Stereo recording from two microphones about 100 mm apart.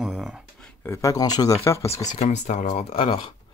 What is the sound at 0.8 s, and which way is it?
Speech, 30° left (ahead or behind).